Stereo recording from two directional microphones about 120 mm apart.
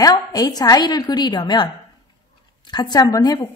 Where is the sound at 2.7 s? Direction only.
35° left (ahead or behind).